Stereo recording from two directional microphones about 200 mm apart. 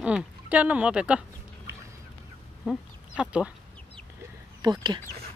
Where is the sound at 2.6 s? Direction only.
5° right (ahead or behind).